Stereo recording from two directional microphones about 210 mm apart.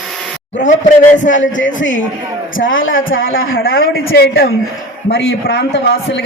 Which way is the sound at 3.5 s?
45° left (ahead or behind).